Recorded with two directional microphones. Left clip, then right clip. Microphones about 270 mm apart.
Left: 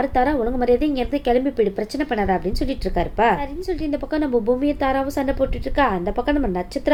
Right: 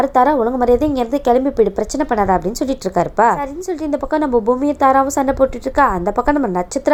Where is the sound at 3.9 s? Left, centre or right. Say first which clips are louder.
Right 6 dB; centre.